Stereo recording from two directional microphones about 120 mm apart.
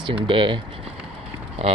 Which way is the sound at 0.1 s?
45° right (ahead or behind).